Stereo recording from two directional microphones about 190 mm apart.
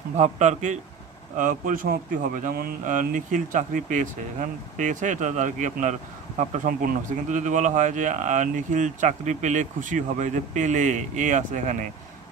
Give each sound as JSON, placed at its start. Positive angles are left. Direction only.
{"t": 0.2, "sound": "speech", "side_deg": -40}